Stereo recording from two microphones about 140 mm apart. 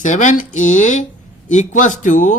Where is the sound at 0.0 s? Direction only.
60° left (ahead or behind).